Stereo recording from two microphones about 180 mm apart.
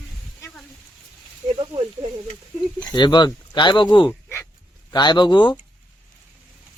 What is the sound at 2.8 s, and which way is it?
Speech, 25° left (ahead or behind).